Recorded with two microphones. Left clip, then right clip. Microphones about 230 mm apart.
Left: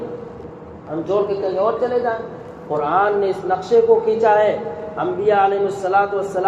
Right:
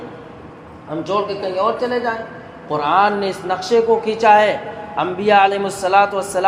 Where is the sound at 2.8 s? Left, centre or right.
Right.